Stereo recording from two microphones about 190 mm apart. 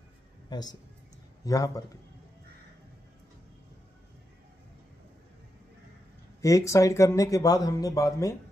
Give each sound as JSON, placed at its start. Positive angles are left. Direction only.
{"t": 0.5, "sound": "a man's voice", "side_deg": 20}
{"t": 6.4, "sound": "speech", "side_deg": 15}